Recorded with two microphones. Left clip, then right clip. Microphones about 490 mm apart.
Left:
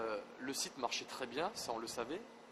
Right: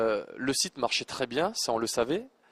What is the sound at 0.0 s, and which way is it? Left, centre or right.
Speech, right.